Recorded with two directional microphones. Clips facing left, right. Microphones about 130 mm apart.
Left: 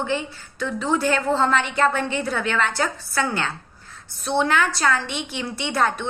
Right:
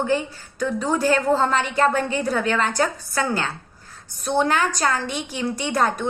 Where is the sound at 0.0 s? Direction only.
45° right (ahead or behind).